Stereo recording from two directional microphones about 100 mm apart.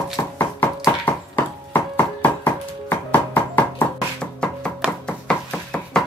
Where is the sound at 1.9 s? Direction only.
20° left (ahead or behind).